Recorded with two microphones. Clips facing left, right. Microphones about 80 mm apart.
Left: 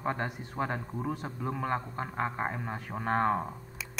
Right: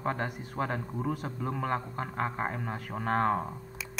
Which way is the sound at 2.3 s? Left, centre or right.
Centre.